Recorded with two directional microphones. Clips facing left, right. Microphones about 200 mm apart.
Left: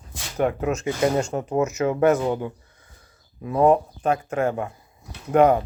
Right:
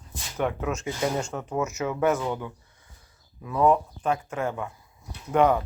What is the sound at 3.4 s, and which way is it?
Speech, 50° left (ahead or behind).